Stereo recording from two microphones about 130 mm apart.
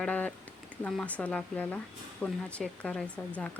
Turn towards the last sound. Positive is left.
turn(degrees=10)  # may be behind; listen again after turning